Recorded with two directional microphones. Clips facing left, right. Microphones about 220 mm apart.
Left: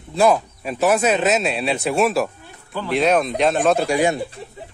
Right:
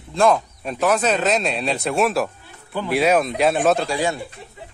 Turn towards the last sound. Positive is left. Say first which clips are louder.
# left 4 dB
turn(degrees=15)  # may be behind; listen again after turning